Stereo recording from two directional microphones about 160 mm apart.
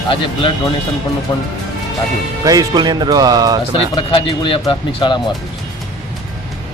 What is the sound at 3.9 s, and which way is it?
Speech, 30° left (ahead or behind).